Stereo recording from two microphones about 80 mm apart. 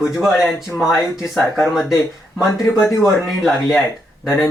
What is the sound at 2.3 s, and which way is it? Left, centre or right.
Speech, centre.